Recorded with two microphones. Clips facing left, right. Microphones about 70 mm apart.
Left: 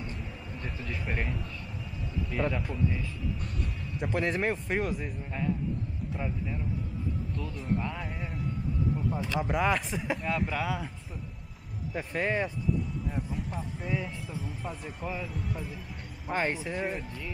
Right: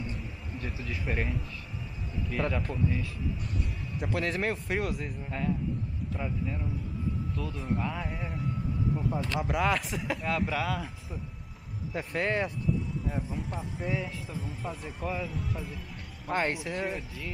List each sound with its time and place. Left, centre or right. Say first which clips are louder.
0.1 s a sound: even; centre
2.3 s speech: even; centre
9.4 s speech: left 1 dB; centre
11.9 s speech: even; centre